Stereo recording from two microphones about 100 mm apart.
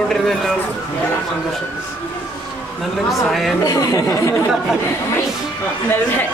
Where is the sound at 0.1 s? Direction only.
5° left (ahead or behind).